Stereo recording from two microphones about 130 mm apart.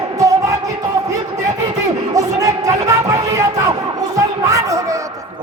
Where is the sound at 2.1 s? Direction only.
25° right (ahead or behind).